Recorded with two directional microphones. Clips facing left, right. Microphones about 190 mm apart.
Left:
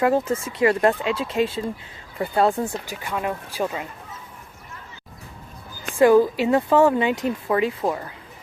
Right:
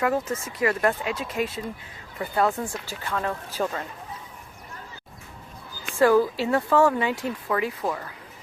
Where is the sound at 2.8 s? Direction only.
15° left (ahead or behind).